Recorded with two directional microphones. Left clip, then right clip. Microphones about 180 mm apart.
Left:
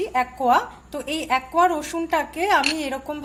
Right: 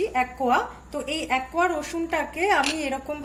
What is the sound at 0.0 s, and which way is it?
A woman's voice, 55° left (ahead or behind).